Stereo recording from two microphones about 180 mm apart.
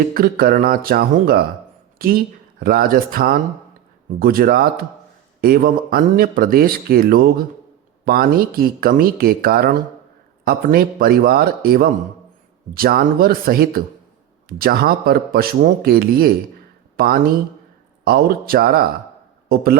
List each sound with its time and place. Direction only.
0.1 s speech: 55° right (ahead or behind)